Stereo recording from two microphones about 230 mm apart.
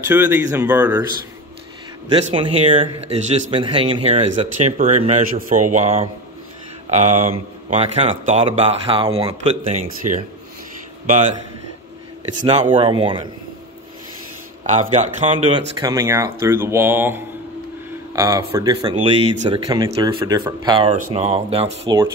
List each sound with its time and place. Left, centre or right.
0.0 s speech: centre
2.1 s a man's voice: right
12.4 s a man's voice: right
14.6 s a man's voice: right
15.8 s speech: centre
20.9 s a man's voice: right